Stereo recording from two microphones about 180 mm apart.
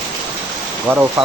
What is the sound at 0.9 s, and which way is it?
Speech, 5° right (ahead or behind).